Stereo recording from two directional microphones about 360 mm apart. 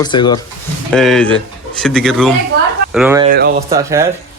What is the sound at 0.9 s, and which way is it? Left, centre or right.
Speech, centre.